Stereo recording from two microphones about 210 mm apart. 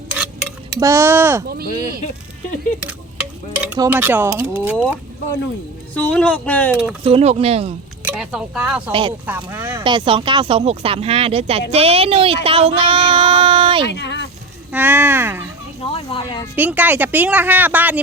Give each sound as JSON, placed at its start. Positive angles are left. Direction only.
{"t": 0.8, "sound": "speech", "side_deg": -15}
{"t": 2.8, "sound": "stir", "side_deg": -5}
{"t": 3.8, "sound": "speech", "side_deg": -10}
{"t": 5.9, "sound": "speech", "side_deg": 5}
{"t": 7.0, "sound": "speech", "side_deg": -30}
{"t": 8.0, "sound": "speech", "side_deg": -5}
{"t": 8.9, "sound": "speech", "side_deg": -25}
{"t": 9.2, "sound": "speech", "side_deg": -10}
{"t": 9.8, "sound": "speech", "side_deg": -25}
{"t": 13.8, "sound": "speech", "side_deg": 55}
{"t": 14.7, "sound": "speech", "side_deg": -10}
{"t": 15.8, "sound": "speech", "side_deg": 25}
{"t": 16.6, "sound": "speech", "side_deg": -10}